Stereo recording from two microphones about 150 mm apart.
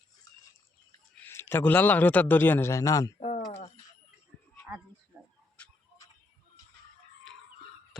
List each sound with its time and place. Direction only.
1.1 s speech: 15° left (ahead or behind)
3.2 s pigeon: 45° left (ahead or behind)